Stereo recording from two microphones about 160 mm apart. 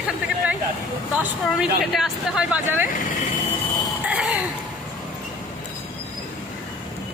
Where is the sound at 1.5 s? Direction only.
Centre (ahead or behind).